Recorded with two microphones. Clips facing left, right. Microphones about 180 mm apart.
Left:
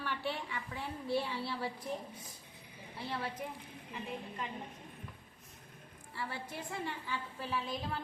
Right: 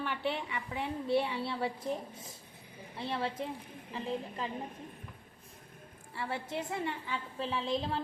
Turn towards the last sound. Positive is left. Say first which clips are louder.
# right 5 dB
turn(degrees=-25)  # may be behind; listen again after turning